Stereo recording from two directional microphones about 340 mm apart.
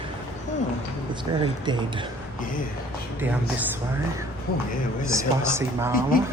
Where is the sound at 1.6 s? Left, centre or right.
Centre.